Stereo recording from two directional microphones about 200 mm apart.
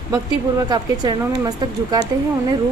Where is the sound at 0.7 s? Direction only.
20° right (ahead or behind).